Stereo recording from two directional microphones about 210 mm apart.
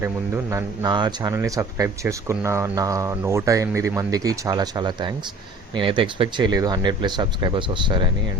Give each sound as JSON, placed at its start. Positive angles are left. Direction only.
{"t": 0.5, "sound": "speech", "side_deg": -15}